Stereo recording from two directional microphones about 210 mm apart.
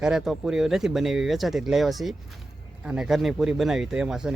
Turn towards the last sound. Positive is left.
turn(degrees=-5)  # may be behind; listen again after turning